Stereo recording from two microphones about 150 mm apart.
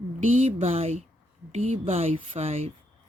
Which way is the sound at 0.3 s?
45° right (ahead or behind).